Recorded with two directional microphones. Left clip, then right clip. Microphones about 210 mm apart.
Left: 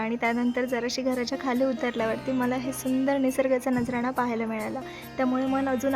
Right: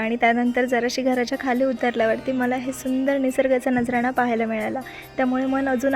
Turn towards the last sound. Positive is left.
turn(degrees=0)  # may be behind; listen again after turning